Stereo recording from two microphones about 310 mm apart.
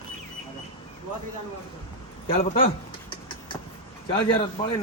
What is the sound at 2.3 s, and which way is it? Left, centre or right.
Speech, left.